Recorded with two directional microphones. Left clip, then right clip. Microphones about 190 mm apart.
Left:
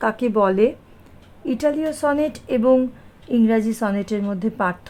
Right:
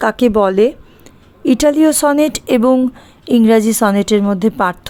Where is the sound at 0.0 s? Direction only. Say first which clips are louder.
Right 6 dB; 35° right (ahead or behind).